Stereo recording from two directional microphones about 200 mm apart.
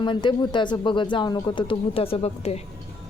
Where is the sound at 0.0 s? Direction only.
25° left (ahead or behind).